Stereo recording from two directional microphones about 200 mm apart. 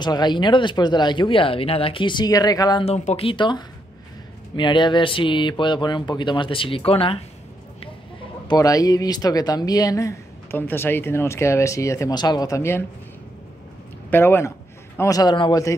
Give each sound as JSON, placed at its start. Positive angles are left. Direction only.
{"t": 0.0, "sound": "speech", "side_deg": 20}
{"t": 2.8, "sound": "speech", "side_deg": 30}
{"t": 8.5, "sound": "speech", "side_deg": 15}
{"t": 14.1, "sound": "speech", "side_deg": 10}